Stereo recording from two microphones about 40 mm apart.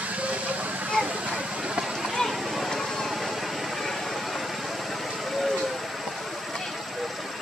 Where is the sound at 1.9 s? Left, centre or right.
Centre.